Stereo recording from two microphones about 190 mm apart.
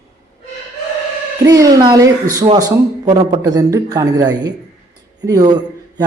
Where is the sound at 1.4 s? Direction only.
20° right (ahead or behind).